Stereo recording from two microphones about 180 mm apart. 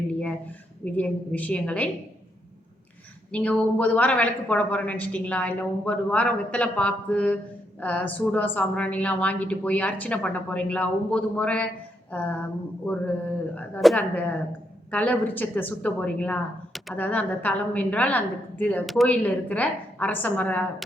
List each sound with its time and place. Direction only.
0.1 s a woman's voice: 5° left (ahead or behind)
3.3 s a woman's voice: 5° left (ahead or behind)